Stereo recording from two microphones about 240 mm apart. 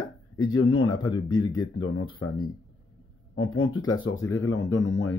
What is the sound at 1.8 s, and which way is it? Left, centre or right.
Speech, left.